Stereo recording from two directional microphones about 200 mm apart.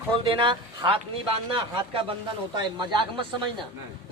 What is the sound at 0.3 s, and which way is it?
Speech, 25° right (ahead or behind).